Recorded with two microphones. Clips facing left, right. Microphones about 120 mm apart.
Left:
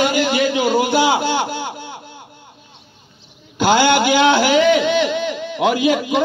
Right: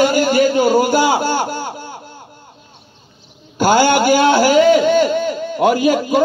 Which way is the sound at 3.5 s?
45° right (ahead or behind).